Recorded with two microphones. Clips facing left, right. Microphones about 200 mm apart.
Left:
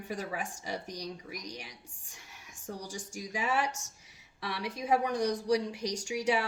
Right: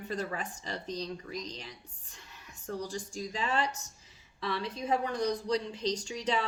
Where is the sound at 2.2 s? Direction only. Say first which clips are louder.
Right 2 dB; 80° left.